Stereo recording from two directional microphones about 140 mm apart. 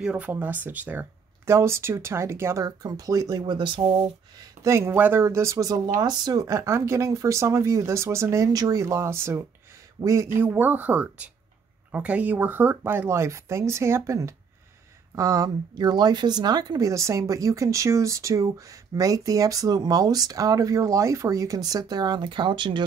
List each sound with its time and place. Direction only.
0.0 s speech: 10° right (ahead or behind); by 3.9 s 35° right (ahead or behind)
4.6 s speech: 20° right (ahead or behind); by 22.8 s 35° right (ahead or behind)